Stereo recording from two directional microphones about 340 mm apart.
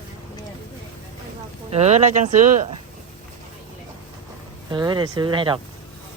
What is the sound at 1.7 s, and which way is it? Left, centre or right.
Speech, centre.